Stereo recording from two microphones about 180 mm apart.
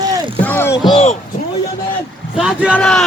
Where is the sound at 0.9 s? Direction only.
35° left (ahead or behind).